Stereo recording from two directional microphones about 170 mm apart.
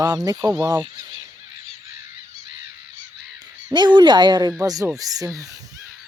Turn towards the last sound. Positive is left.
turn(degrees=-20)  # may be behind; listen again after turning